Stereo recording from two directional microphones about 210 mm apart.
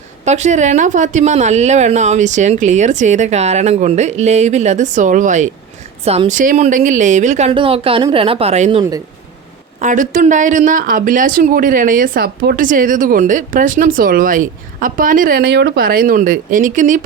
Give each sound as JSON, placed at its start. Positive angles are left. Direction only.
{"t": 0.3, "sound": "speech", "side_deg": -35}
{"t": 9.8, "sound": "speech", "side_deg": -40}